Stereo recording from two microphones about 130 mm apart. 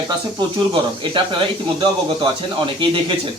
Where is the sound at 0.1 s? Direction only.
40° right (ahead or behind).